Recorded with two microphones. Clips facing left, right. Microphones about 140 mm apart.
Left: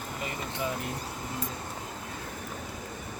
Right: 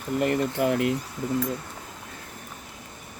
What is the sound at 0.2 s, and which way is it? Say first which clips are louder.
Speech: right 11 dB; 60° right (ahead or behind).